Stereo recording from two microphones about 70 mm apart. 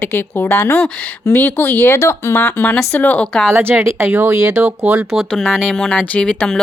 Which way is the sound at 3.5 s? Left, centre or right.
Right.